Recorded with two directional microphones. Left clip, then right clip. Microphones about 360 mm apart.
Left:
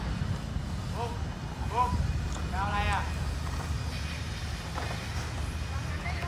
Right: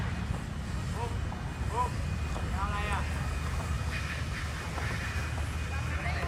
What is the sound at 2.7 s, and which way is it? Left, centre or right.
Vehicle, left.